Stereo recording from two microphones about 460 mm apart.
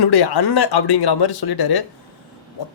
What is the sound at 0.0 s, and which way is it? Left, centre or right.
Speech, left.